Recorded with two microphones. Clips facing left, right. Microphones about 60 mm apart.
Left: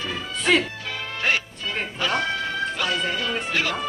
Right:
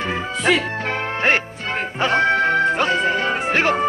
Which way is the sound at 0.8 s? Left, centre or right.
Right.